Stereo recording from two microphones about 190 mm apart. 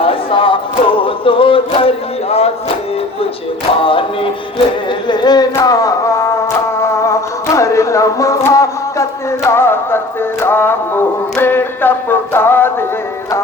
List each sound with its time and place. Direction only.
0.0 s music: 30° left (ahead or behind)
3.8 s music: 30° left (ahead or behind)
6.9 s a sound: 15° left (ahead or behind)
10.4 s music: 10° left (ahead or behind)